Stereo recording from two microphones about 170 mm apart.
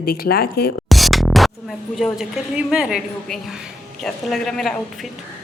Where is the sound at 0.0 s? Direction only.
60° left (ahead or behind).